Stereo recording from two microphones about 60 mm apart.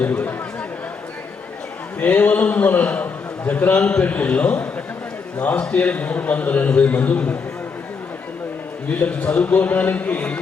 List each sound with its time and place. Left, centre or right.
0.0 s a man's voice: left
2.0 s a man's voice: left
8.9 s a man's voice: left